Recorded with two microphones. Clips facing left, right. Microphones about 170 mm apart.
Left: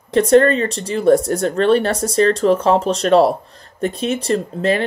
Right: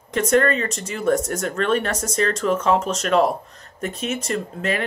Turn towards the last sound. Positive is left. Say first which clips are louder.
# left 7 dB
turn(degrees=30)  # may be behind; listen again after turning